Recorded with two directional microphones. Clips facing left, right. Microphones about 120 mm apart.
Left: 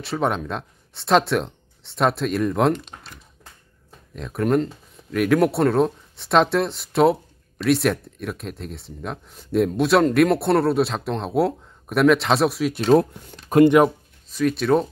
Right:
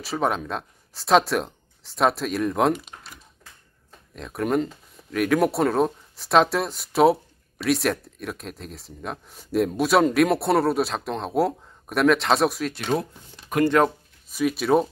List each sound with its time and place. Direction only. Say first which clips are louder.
0.0 s speech: left 1 dB; centre (ahead or behind)
12.8 s speech: left 11 dB; 70° left (ahead or behind)
13.8 s speech: left 4 dB; 10° left (ahead or behind)
14.3 s speech: left 1 dB; 5° right (ahead or behind)